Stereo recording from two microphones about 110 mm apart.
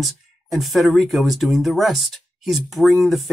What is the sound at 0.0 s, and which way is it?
Speech, centre (ahead or behind).